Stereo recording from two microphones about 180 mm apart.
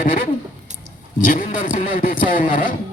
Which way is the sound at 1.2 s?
45° left (ahead or behind).